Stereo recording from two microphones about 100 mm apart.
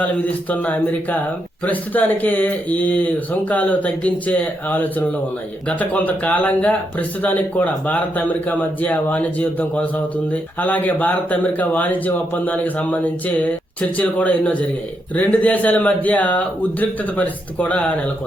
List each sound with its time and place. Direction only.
0.5 s speech: 15° left (ahead or behind)